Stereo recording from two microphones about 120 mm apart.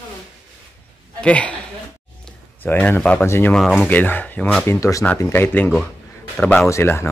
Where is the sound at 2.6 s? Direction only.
15° left (ahead or behind).